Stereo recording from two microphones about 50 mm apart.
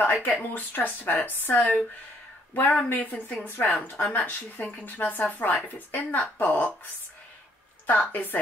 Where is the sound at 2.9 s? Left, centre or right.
Left.